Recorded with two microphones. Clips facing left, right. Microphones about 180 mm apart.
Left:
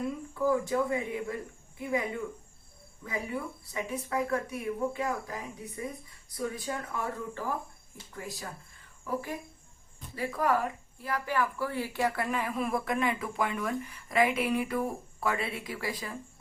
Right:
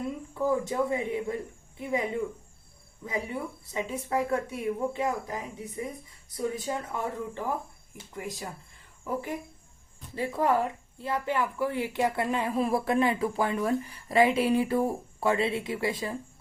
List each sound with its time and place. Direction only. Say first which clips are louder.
0.3 s a woman's voice: right 1 dB; 20° right (ahead or behind)
3.7 s a woman's voice: right 3 dB; 20° right (ahead or behind)